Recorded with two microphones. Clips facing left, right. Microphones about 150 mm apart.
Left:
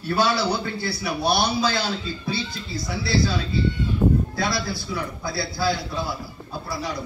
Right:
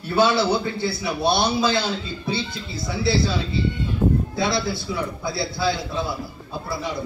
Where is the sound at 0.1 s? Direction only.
25° right (ahead or behind).